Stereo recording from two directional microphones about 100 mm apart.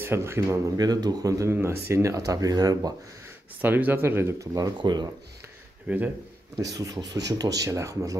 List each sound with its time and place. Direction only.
0.0 s speech: 25° right (ahead or behind)
3.6 s speech: 20° right (ahead or behind); by 5.1 s 45° right (ahead or behind)
5.9 s speech: 15° right (ahead or behind)
6.5 s speech: 35° right (ahead or behind)